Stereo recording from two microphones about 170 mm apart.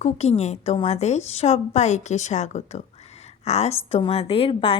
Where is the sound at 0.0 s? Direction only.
40° left (ahead or behind).